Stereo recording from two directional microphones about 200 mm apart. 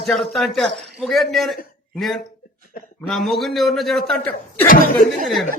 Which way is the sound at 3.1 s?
Centre (ahead or behind).